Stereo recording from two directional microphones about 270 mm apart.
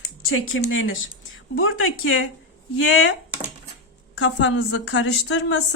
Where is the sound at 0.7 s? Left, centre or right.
Left.